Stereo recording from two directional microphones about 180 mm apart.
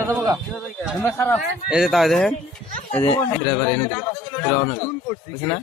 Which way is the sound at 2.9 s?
15° left (ahead or behind).